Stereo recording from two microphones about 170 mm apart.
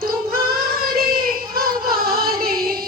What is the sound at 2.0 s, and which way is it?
Singing, 60° right (ahead or behind).